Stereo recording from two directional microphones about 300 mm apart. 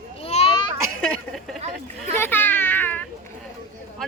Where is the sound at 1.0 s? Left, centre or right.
Centre.